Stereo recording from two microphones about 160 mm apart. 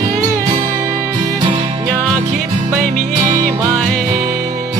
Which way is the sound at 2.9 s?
55° right (ahead or behind).